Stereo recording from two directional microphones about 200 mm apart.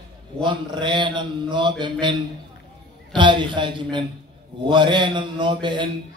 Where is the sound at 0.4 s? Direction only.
25° right (ahead or behind).